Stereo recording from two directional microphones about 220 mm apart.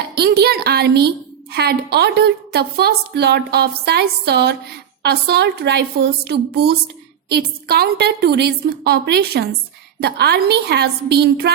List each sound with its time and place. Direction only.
0.2 s a woman's voice: 45° right (ahead or behind)